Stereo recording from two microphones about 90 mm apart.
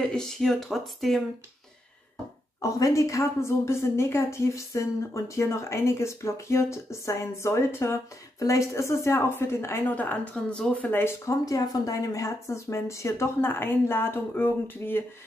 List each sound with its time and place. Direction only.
0.1 s speech: 5° left (ahead or behind)
2.6 s a woman's voice: 35° left (ahead or behind)
9.9 s speech: 15° left (ahead or behind)
11.4 s a woman's voice: 40° left (ahead or behind); by 15.0 s 25° left (ahead or behind)